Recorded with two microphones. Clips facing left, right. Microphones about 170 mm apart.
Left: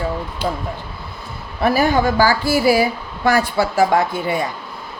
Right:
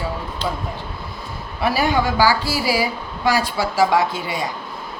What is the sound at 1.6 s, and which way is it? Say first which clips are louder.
Speech: left 3 dB; 50° left (ahead or behind).